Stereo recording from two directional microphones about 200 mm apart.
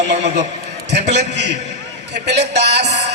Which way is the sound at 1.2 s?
60° right (ahead or behind).